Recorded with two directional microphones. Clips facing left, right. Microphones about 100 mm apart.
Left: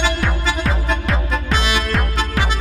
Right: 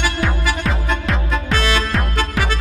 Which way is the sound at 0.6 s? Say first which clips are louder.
Even; centre (ahead or behind).